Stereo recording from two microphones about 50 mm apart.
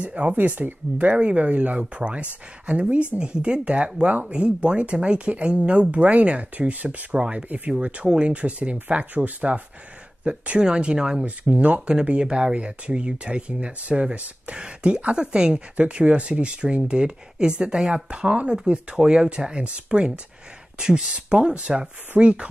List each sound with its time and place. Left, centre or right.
0.0 s speech: right
11.5 s speech: right